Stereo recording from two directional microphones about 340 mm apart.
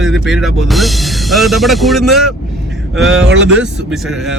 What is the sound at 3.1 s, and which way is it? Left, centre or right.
Speech, right.